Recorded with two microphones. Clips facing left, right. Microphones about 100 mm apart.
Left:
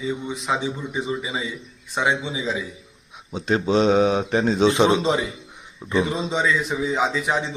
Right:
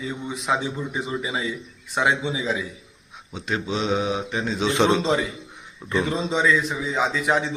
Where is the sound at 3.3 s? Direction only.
35° left (ahead or behind).